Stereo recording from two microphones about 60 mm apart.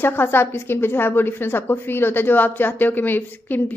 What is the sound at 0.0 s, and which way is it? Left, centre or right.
A woman's voice, left.